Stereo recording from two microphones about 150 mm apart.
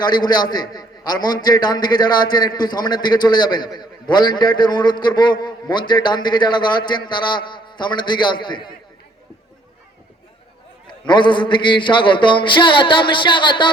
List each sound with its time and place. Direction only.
0.0 s a man's voice: 25° left (ahead or behind)
10.8 s a man's voice: 30° left (ahead or behind)